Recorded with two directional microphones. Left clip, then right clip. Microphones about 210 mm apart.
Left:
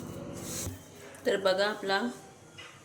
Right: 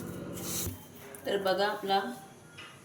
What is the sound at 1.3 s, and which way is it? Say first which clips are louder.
Speech: left 2 dB; 50° left (ahead or behind).